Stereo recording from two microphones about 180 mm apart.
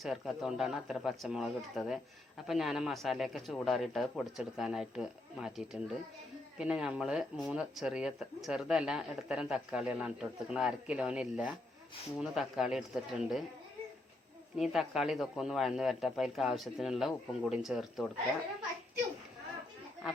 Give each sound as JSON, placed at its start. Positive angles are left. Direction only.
{"t": 0.0, "sound": "speech", "side_deg": 0}
{"t": 14.5, "sound": "speech", "side_deg": 0}